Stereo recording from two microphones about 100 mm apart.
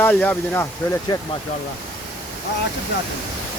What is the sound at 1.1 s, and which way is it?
Speech, 45° left (ahead or behind).